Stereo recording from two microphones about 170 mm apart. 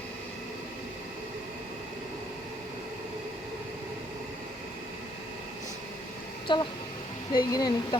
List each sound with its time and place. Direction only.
6.5 s speech: 30° left (ahead or behind)